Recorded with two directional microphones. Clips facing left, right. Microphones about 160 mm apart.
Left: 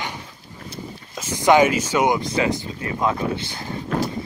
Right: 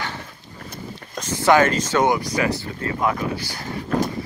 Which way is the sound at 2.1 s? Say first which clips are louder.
Left 1 dB; 25° left (ahead or behind).